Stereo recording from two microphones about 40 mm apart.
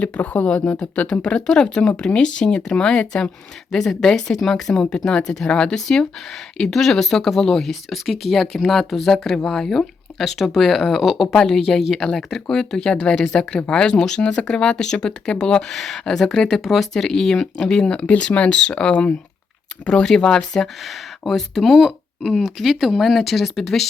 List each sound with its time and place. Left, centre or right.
0.0 s speech: left
0.4 s speech: left; by 4.8 s centre
4.9 s speech: centre
15.7 s speech: centre
20.8 s speech: centre